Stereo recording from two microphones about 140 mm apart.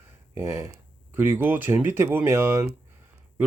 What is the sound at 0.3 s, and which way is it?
Speech, 20° right (ahead or behind).